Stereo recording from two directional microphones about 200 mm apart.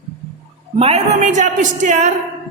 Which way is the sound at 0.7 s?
30° right (ahead or behind).